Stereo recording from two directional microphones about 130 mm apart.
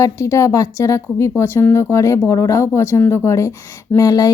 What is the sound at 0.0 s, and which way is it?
Speech, 25° left (ahead or behind).